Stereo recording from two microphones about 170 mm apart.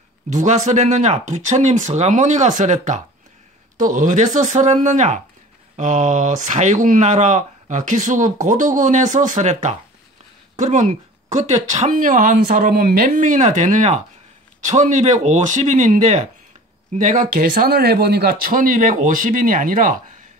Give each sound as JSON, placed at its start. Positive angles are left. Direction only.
{"t": 0.3, "sound": "speech", "side_deg": -45}